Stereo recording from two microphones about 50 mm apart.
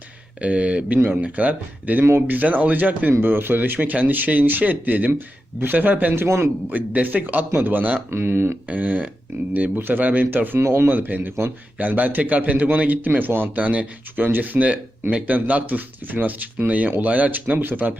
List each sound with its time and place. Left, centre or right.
0.4 s speech: right
3.1 s speech: right
6.2 s speech: right
6.7 s speech: right
8.1 s speech: right
8.6 s speech: right
10.6 s speech: right
10.8 s speech: right
14.2 s speech: right